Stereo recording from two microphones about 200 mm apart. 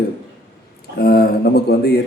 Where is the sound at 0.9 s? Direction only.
50° left (ahead or behind).